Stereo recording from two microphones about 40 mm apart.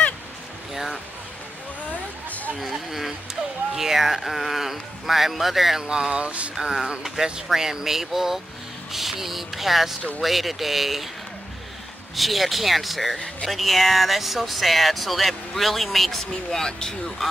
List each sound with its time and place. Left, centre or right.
1.9 s a sound: left
2.6 s speech: centre
5.8 s speech: centre
6.5 s speech: centre
12.2 s speech: centre